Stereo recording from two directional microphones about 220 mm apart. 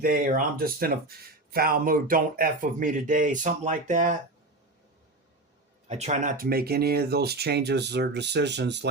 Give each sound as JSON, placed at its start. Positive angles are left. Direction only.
{"t": 0.0, "sound": "speech", "side_deg": -40}
{"t": 5.9, "sound": "speech", "side_deg": -30}